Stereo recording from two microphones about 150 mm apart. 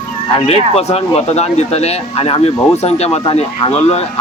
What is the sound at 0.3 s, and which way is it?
Speech, 40° left (ahead or behind).